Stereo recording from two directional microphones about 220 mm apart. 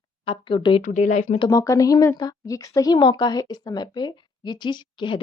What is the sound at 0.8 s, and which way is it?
Speech, 35° left (ahead or behind).